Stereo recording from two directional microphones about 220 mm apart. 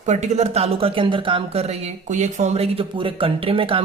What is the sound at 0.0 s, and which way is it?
Speech, 30° right (ahead or behind).